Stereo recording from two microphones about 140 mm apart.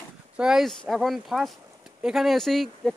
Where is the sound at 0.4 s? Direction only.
5° right (ahead or behind).